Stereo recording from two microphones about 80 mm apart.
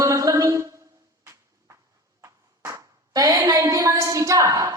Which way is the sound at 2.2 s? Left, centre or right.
Right.